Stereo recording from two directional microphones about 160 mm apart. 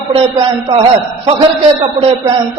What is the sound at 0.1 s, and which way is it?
Speech, 35° right (ahead or behind).